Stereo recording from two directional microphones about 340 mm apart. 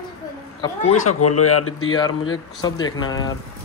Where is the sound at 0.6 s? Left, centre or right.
Centre.